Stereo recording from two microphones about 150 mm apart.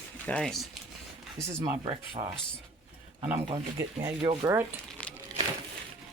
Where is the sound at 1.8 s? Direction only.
35° right (ahead or behind).